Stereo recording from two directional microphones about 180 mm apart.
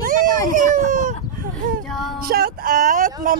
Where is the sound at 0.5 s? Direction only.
45° right (ahead or behind).